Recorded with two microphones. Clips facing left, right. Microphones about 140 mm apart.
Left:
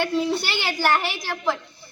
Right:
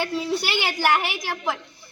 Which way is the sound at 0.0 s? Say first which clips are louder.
Left 2 dB; 5° right (ahead or behind).